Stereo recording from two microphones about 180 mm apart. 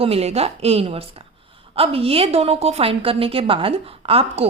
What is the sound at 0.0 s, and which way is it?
A woman's voice, 35° right (ahead or behind).